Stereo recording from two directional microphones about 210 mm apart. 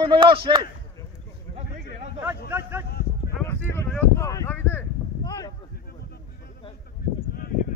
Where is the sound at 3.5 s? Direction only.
10° left (ahead or behind).